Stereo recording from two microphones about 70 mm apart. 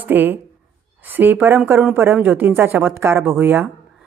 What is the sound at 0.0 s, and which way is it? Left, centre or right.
A woman's voice, right.